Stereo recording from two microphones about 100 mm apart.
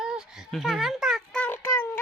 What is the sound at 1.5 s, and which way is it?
Child singing, 25° left (ahead or behind).